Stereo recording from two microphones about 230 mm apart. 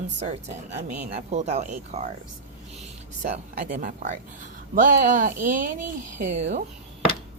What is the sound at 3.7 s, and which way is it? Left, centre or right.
Speech, right.